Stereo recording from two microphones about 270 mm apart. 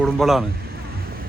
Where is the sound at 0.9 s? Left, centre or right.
Right.